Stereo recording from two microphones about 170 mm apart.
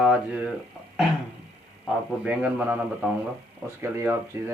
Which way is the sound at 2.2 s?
10° right (ahead or behind).